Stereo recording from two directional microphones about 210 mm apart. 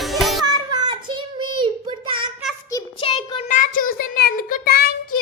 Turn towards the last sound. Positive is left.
turn(degrees=45)  # may be behind; listen again after turning